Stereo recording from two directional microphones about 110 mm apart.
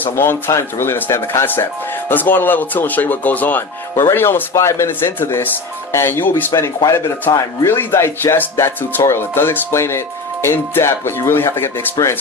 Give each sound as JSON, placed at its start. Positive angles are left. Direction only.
{"t": 0.0, "sound": "speech", "side_deg": 20}